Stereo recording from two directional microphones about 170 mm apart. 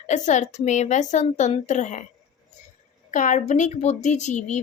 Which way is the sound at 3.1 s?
50° left (ahead or behind).